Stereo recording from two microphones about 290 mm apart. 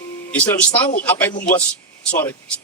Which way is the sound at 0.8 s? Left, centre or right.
Left.